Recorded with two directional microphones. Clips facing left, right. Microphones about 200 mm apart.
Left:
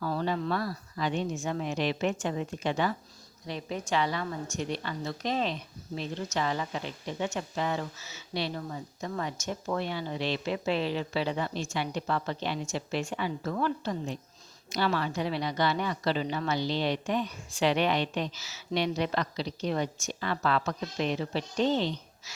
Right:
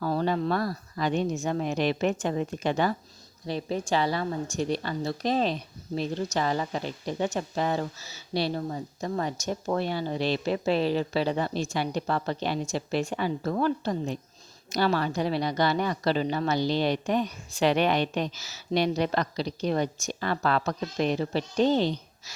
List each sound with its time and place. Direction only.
0.0 s a woman's voice: 40° right (ahead or behind)